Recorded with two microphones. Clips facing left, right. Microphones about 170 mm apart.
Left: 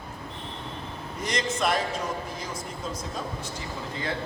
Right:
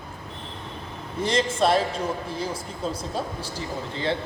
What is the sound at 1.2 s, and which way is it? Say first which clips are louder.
A man's voice: right 5 dB; 30° right (ahead or behind).